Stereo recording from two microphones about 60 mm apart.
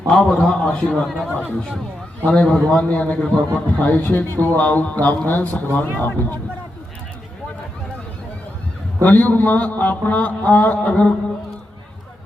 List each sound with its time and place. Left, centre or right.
0.1 s a man's voice: centre
2.2 s a man's voice: centre
9.0 s a man's voice: left